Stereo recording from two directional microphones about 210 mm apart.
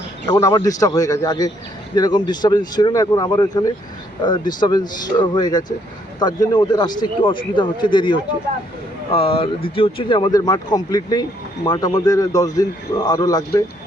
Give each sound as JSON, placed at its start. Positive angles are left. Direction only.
{"t": 0.3, "sound": "a man's voice", "side_deg": 15}